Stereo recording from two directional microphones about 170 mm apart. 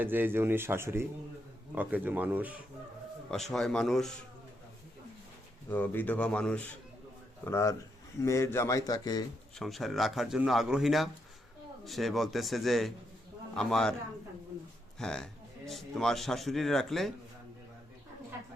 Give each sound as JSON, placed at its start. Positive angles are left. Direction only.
{"t": 0.0, "sound": "speech", "side_deg": -10}
{"t": 3.5, "sound": "speech", "side_deg": 5}
{"t": 5.6, "sound": "a man's voice", "side_deg": 10}
{"t": 7.4, "sound": "a man's voice", "side_deg": 15}
{"t": 9.6, "sound": "speech", "side_deg": 0}
{"t": 14.9, "sound": "speech", "side_deg": 5}